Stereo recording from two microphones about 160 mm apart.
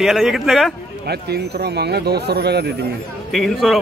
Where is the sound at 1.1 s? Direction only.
90° right.